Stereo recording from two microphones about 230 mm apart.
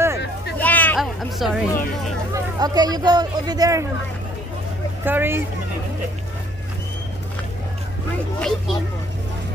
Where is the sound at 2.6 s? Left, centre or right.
Centre.